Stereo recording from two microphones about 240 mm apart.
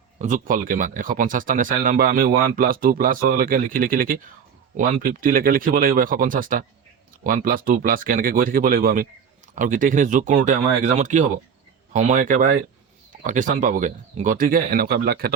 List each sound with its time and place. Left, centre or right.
0.2 s speech: right